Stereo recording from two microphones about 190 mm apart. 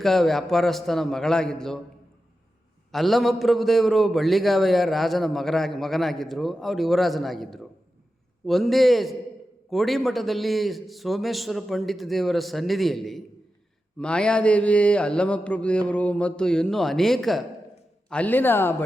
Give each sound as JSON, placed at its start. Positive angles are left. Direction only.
{"t": 0.0, "sound": "a man's voice", "side_deg": 0}
{"t": 2.9, "sound": "a man's voice", "side_deg": 0}